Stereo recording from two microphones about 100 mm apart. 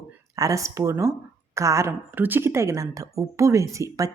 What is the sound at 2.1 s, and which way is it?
Speech, 20° right (ahead or behind).